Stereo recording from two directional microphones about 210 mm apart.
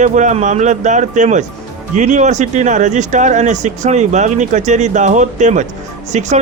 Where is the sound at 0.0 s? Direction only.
35° right (ahead or behind).